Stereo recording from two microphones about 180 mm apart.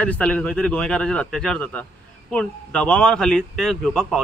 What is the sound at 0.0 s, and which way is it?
Speech, 5° left (ahead or behind).